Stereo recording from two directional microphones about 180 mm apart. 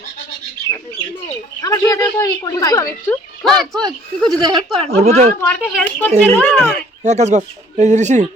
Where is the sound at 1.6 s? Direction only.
20° left (ahead or behind).